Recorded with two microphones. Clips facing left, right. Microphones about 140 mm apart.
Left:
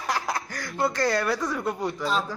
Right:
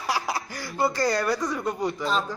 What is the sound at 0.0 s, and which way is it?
Speech, 5° right (ahead or behind).